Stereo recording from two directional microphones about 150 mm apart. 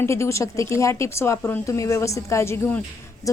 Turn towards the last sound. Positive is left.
turn(degrees=20)  # may be behind; listen again after turning